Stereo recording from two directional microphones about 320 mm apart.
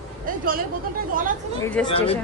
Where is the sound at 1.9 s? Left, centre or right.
Centre.